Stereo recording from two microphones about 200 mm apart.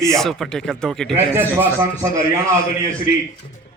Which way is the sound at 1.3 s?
10° right (ahead or behind).